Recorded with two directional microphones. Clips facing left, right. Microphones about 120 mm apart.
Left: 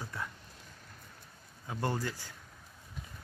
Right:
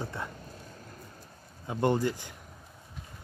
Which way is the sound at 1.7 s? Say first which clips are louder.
Right 8 dB; 20° right (ahead or behind).